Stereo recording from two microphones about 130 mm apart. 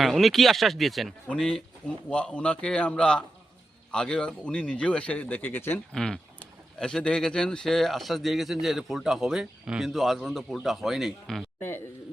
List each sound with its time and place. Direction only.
0.0 s speech: centre (ahead or behind); by 5.8 s 15° left (ahead or behind)
5.9 s speech: 5° left (ahead or behind)